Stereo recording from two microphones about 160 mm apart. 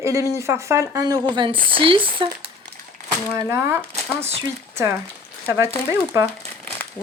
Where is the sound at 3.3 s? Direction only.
20° right (ahead or behind).